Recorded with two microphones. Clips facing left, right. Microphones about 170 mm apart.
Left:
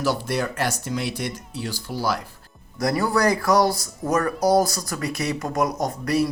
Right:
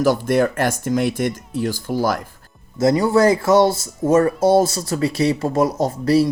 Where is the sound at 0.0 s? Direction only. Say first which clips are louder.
Right 8 dB; 50° right (ahead or behind).